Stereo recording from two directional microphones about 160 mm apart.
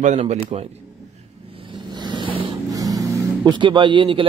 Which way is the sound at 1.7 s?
30° right (ahead or behind).